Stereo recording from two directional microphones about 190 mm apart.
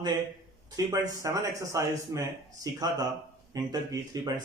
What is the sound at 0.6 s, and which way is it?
Speech, 20° right (ahead or behind).